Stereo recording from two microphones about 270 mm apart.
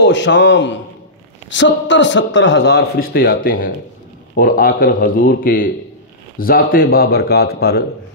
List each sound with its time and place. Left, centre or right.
0.0 s speech: left